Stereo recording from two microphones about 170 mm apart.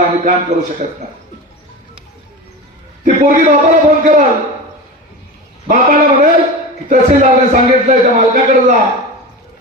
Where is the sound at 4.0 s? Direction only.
50° right (ahead or behind).